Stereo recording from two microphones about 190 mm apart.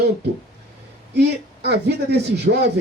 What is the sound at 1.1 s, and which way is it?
Speech, 60° right (ahead or behind).